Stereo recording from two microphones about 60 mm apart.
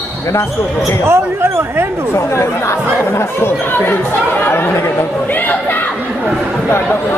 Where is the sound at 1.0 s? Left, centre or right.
Right.